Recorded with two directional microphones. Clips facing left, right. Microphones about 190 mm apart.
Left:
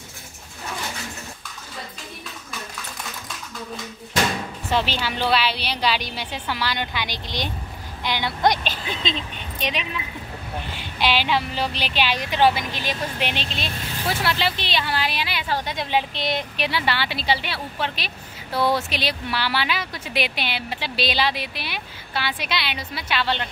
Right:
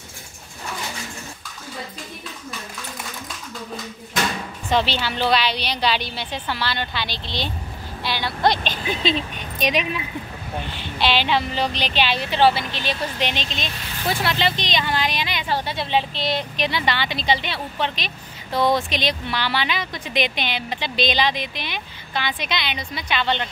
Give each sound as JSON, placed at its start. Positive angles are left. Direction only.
{"t": 4.6, "sound": "speech", "side_deg": 10}
{"t": 9.0, "sound": "speech", "side_deg": -10}
{"t": 10.8, "sound": "speech", "side_deg": 10}